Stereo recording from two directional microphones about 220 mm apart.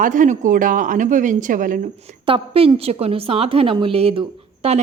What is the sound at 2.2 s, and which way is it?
A woman's voice, 25° right (ahead or behind).